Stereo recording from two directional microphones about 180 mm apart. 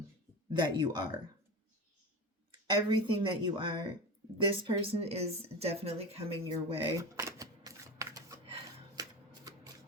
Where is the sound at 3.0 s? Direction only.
30° right (ahead or behind).